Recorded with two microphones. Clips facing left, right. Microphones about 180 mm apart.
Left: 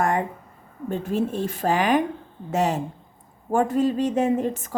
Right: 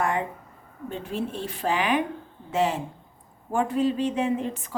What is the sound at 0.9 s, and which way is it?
A woman's voice, 45° left (ahead or behind).